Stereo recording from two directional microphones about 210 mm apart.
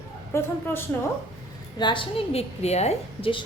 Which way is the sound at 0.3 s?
10° left (ahead or behind).